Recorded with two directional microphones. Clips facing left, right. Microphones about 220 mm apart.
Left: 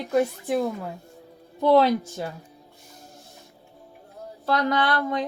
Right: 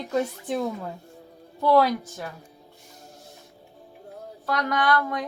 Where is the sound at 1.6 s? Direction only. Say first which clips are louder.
Left 2 dB; 25° left (ahead or behind).